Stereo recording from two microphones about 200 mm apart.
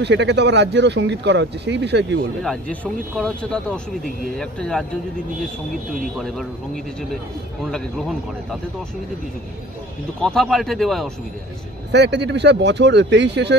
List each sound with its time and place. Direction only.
0.0 s speech: 60° right (ahead or behind)
2.4 s speech: 5° left (ahead or behind)
6.1 s speech: centre (ahead or behind)
10.2 s speech: centre (ahead or behind)
11.9 s speech: 60° right (ahead or behind)